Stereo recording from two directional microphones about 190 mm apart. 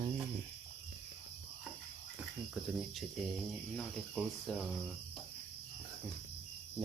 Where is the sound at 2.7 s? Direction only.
Centre (ahead or behind).